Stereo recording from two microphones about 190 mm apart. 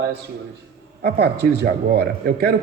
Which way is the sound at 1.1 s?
60° right (ahead or behind).